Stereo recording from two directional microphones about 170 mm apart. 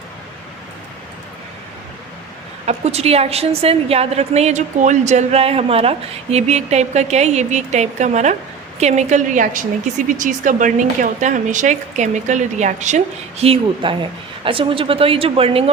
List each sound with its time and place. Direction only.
2.6 s a woman's voice: 40° right (ahead or behind)